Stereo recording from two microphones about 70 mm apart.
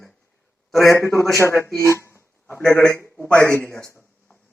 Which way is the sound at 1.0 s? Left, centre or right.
Left.